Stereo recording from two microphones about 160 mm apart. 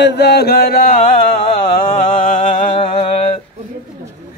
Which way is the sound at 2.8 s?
35° left (ahead or behind).